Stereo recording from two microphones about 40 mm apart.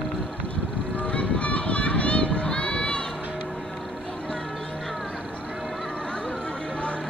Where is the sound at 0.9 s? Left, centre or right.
Left.